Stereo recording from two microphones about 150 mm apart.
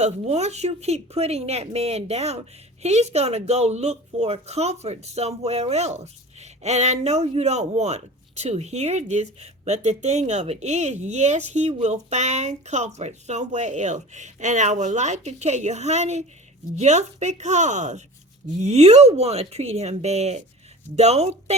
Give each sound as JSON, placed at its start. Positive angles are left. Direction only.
{"t": 0.0, "sound": "speech", "side_deg": -45}